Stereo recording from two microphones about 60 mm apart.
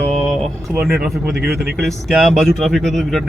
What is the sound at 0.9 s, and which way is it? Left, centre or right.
Speech, centre.